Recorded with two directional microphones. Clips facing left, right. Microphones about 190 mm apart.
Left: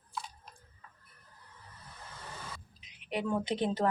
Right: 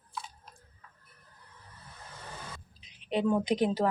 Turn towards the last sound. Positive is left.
turn(degrees=-10)  # may be behind; listen again after turning